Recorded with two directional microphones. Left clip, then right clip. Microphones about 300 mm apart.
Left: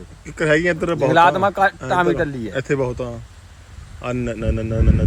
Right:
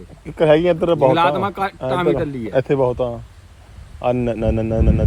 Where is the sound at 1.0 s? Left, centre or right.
Centre.